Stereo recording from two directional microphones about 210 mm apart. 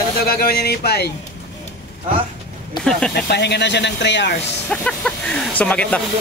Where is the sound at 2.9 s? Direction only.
5° left (ahead or behind).